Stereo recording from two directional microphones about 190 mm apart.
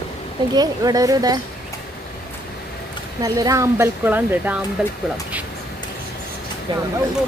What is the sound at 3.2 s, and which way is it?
Speech, 20° right (ahead or behind).